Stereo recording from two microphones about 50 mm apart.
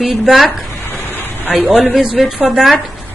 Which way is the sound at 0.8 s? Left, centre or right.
Left.